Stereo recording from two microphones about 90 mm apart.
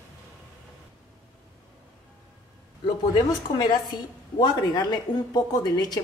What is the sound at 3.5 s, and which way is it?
A woman's voice, 60° left (ahead or behind).